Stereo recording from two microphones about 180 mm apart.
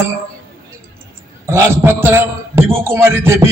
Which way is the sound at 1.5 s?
15° right (ahead or behind).